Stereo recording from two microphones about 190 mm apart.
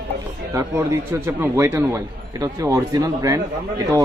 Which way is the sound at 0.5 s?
15° right (ahead or behind).